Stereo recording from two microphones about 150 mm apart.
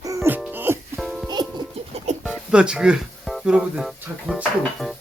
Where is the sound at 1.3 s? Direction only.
30° right (ahead or behind).